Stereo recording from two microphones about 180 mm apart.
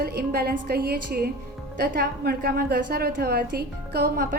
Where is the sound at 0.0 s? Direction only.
65° right (ahead or behind).